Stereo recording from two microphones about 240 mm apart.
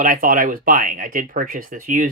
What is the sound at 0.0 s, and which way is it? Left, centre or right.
Speech, right.